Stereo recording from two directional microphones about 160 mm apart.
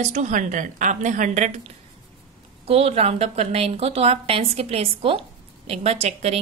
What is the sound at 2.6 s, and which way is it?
A woman's voice, 40° right (ahead or behind).